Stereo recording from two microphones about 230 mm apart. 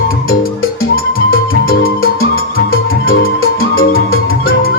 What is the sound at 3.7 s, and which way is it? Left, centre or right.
Music, left.